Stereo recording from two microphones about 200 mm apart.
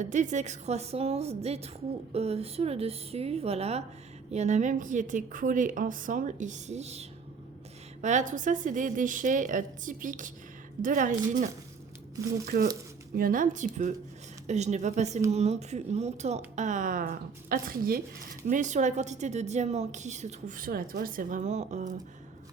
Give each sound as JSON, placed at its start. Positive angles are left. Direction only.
{"t": 0.0, "sound": "a woman's voice", "side_deg": -40}
{"t": 12.2, "sound": "speech", "side_deg": -15}
{"t": 13.1, "sound": "a woman's voice", "side_deg": -45}